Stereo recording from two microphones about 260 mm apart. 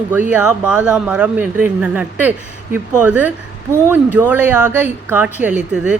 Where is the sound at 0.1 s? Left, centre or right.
Centre.